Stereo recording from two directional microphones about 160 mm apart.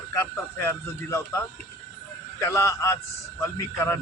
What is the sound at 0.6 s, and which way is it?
Speech, 15° left (ahead or behind).